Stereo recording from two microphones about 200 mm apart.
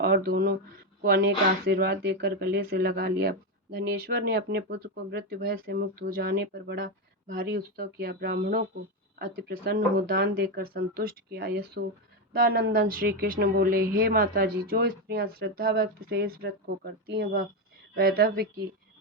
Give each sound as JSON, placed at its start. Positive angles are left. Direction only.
{"t": 0.0, "sound": "speech", "side_deg": -50}